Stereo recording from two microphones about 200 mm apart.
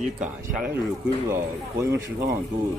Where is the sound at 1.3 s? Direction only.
15° right (ahead or behind).